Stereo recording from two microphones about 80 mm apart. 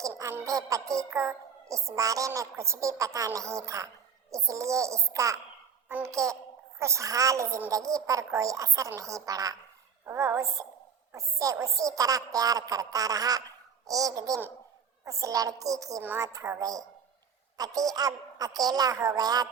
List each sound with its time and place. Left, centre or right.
0.4 s music: right
7.7 s a woman's voice: right
10.1 s music: right
11.3 s a woman's voice: right